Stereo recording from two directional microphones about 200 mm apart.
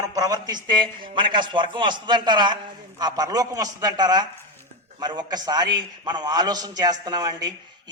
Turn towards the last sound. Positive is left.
turn(degrees=-20)  # may be behind; listen again after turning